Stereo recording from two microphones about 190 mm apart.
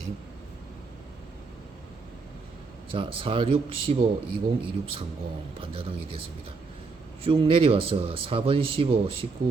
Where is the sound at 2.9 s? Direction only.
25° right (ahead or behind).